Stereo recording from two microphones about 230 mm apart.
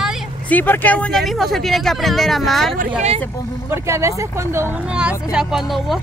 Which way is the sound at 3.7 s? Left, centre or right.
Centre.